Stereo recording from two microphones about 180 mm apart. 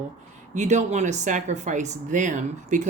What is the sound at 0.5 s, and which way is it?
Speech, 40° right (ahead or behind).